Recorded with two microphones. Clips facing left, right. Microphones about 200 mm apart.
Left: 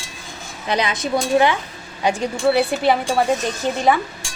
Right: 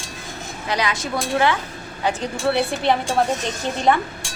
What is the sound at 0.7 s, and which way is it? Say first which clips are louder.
Speech: left 3 dB; 20° left (ahead or behind).